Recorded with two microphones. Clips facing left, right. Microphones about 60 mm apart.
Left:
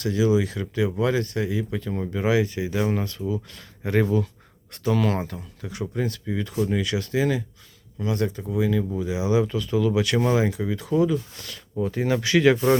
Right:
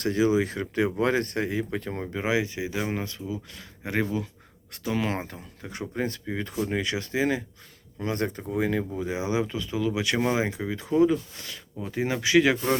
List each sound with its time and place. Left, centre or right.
0.0 s speech: right
2.1 s speech: centre
5.1 s speech: right
8.0 s speech: right
9.3 s speech: right
11.4 s speech: centre